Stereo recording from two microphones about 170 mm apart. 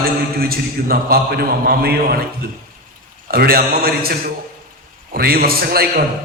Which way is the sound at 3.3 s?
60° right (ahead or behind).